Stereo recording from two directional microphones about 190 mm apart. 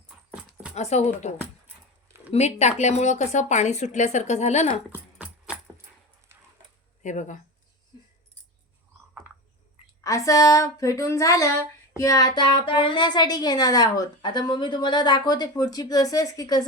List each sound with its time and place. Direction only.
0.7 s speech: 35° left (ahead or behind)
2.3 s speech: 35° left (ahead or behind)
4.9 s a sound: 5° right (ahead or behind)
7.0 s speech: 40° left (ahead or behind)
10.0 s speech: 15° left (ahead or behind)